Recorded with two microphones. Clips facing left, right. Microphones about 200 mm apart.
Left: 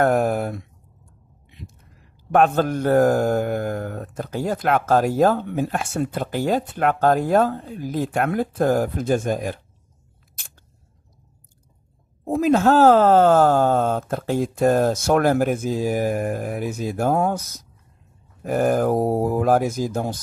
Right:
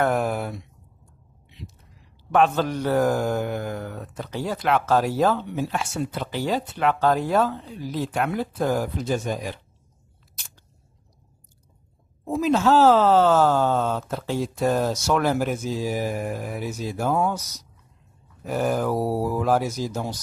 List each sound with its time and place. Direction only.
0.0 s a sound: 45° left (ahead or behind)
1.5 s speech: 50° left (ahead or behind)
12.3 s speech: 50° left (ahead or behind)